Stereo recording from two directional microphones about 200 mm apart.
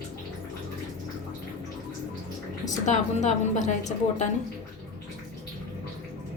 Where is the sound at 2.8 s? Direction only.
35° left (ahead or behind).